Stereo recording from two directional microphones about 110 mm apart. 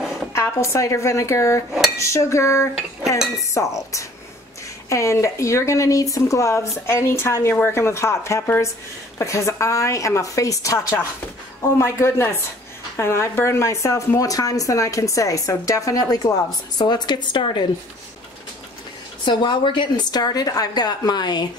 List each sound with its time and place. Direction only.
0.3 s a woman's voice: 25° left (ahead or behind); by 17.6 s 45° left (ahead or behind)
19.2 s speech: 45° left (ahead or behind)